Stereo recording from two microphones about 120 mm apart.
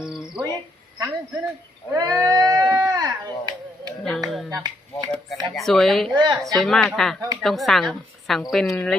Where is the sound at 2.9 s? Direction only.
30° right (ahead or behind).